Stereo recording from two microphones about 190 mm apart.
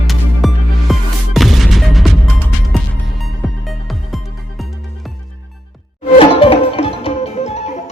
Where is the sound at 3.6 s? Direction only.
Centre (ahead or behind).